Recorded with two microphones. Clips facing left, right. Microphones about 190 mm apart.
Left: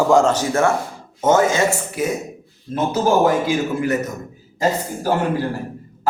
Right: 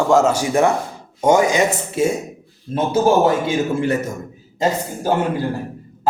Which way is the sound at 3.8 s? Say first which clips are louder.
Right 1 dB; 30° right (ahead or behind).